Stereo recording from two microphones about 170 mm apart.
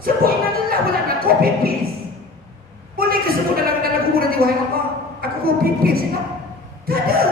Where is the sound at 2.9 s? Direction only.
60° right (ahead or behind).